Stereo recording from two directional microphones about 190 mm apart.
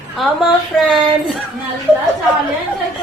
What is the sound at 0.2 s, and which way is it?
Speech, centre (ahead or behind).